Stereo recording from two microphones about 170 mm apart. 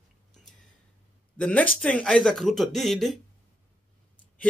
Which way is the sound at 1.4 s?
5° left (ahead or behind).